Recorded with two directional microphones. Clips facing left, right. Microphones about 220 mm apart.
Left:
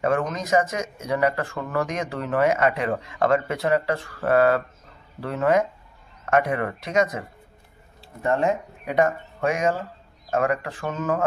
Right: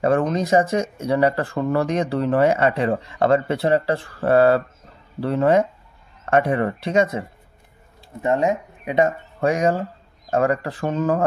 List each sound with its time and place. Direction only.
0.0 s speech: 30° right (ahead or behind)
8.2 s speech: 20° right (ahead or behind)
9.4 s speech: 35° right (ahead or behind)